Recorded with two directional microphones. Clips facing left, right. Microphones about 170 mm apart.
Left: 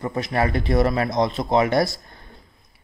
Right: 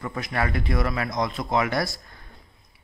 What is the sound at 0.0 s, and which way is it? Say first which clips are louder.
Speech: left 5 dB; 30° left (ahead or behind).